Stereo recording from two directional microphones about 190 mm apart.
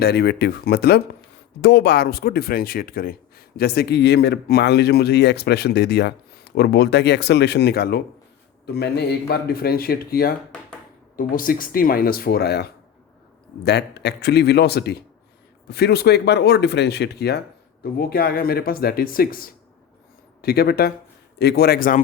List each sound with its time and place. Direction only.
0.0 s speech: 60° left (ahead or behind)